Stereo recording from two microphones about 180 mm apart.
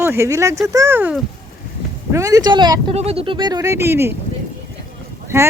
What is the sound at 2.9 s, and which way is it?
Speech, 35° right (ahead or behind).